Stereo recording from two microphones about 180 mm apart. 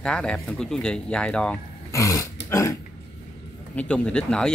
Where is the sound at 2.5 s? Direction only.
20° left (ahead or behind).